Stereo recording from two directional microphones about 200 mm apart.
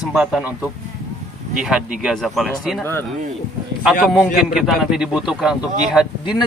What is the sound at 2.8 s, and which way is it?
Speech, 10° left (ahead or behind).